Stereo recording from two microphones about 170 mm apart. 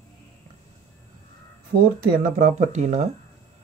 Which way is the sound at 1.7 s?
90° right.